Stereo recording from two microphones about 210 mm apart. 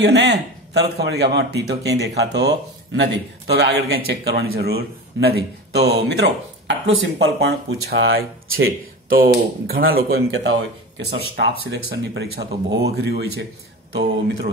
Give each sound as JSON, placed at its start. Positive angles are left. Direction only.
{"t": 0.0, "sound": "speech", "side_deg": -55}
{"t": 8.5, "sound": "speech", "side_deg": -70}
{"t": 9.1, "sound": "speech", "side_deg": -45}